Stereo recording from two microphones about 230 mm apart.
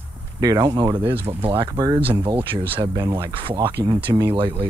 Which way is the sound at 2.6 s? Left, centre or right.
Centre.